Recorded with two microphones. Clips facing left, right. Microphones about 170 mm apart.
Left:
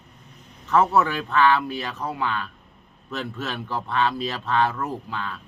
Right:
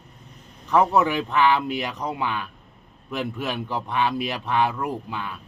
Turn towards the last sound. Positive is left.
turn(degrees=-15)  # may be behind; listen again after turning